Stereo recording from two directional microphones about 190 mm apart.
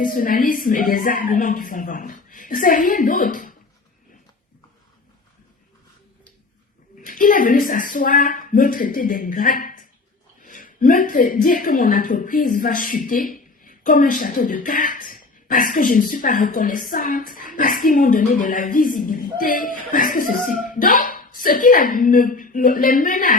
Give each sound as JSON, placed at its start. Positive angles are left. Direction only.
{"t": 0.0, "sound": "a woman's voice", "side_deg": 45}
{"t": 7.0, "sound": "a woman's voice", "side_deg": 45}